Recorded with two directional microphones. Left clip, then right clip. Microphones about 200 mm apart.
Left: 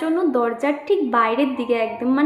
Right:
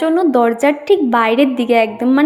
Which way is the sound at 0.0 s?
45° right (ahead or behind).